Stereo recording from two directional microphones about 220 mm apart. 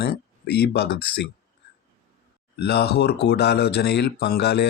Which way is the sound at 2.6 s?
50° left (ahead or behind).